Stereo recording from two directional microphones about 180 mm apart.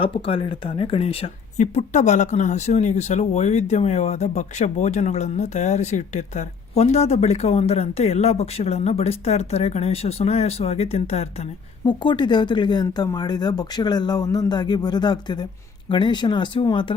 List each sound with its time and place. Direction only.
0.0 s speech: 30° left (ahead or behind)
11.9 s speech: 25° left (ahead or behind)